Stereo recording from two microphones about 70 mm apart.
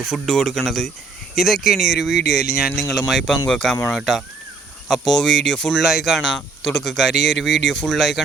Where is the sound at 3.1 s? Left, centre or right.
Centre.